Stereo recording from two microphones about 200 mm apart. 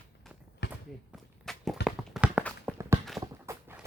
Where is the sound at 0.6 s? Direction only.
55° left (ahead or behind).